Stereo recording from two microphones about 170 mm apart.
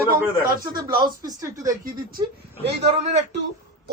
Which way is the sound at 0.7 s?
25° right (ahead or behind).